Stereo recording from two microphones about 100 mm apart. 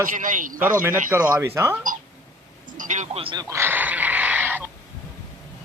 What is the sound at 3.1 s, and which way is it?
Speech, 65° right (ahead or behind).